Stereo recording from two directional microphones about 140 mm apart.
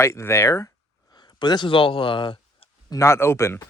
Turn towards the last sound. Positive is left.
turn(degrees=20)  # may be behind; listen again after turning